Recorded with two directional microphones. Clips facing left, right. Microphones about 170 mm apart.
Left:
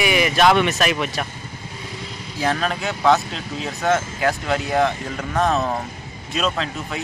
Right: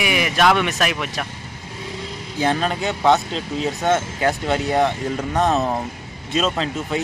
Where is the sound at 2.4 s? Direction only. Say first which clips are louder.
Right 2 dB; 25° right (ahead or behind).